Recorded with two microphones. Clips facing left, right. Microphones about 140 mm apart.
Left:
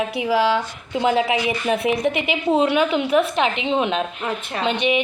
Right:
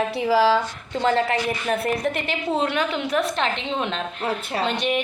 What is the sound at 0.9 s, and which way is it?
A woman's voice, 10° left (ahead or behind).